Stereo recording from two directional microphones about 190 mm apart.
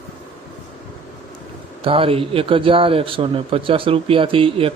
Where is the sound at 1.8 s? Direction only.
30° right (ahead or behind).